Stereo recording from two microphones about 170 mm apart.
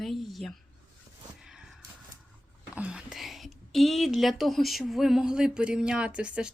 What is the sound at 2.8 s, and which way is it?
Speech, 5° right (ahead or behind).